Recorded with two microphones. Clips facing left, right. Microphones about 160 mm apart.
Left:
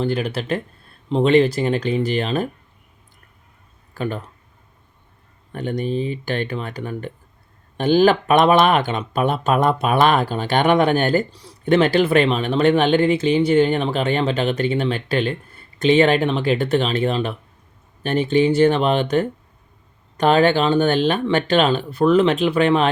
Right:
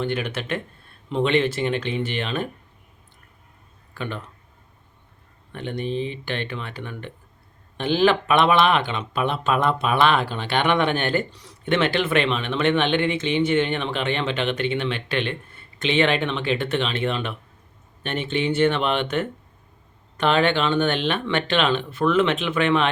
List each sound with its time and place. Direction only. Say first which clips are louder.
0.0 s speech: left 4 dB; 35° left (ahead or behind)
3.9 s speech: left 6 dB; 40° left (ahead or behind)
5.5 s speech: left 4 dB; 40° left (ahead or behind)